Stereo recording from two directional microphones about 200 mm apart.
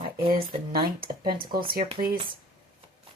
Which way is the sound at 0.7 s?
45° right (ahead or behind).